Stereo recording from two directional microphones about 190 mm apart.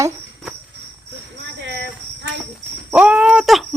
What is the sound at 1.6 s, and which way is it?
Cricket, 65° right (ahead or behind).